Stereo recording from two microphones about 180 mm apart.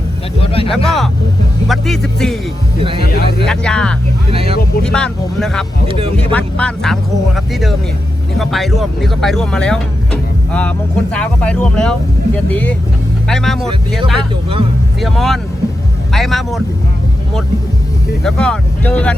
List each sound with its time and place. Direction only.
0.4 s speech: 30° left (ahead or behind)
0.9 s speech: centre (ahead or behind)
3.1 s speech: 60° left (ahead or behind)
3.4 s speech: 5° left (ahead or behind)
4.3 s speech: 30° right (ahead or behind)
4.8 s speech: 5° left (ahead or behind)
5.9 s speech: 30° right (ahead or behind)
6.3 s speech: 5° left (ahead or behind)
15.0 s speech: centre (ahead or behind)
18.2 s speech: 5° left (ahead or behind)